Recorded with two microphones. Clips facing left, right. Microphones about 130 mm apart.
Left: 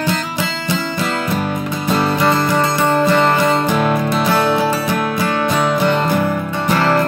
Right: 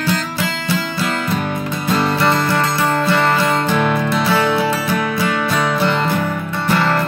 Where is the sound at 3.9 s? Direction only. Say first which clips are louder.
Left 1 dB; 15° left (ahead or behind).